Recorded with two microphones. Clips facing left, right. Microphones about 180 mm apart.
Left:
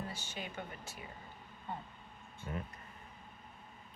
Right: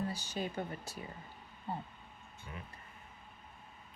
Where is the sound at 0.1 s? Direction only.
35° right (ahead or behind).